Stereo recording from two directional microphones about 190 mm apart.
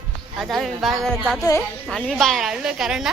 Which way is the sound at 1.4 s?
15° left (ahead or behind).